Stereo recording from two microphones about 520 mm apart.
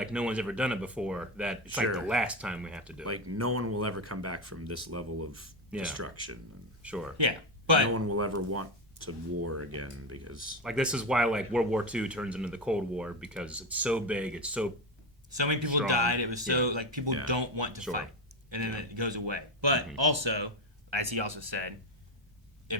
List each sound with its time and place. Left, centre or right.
0.0 s speech: centre
3.0 s speech: right
5.7 s speech: centre
7.2 s speech: right
7.9 s speech: right
10.6 s speech: centre
15.3 s speech: right